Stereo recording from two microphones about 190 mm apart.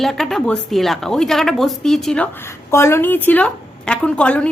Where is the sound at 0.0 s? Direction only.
Centre (ahead or behind).